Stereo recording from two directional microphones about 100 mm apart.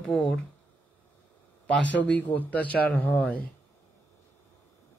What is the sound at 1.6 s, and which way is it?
Speech, 10° left (ahead or behind).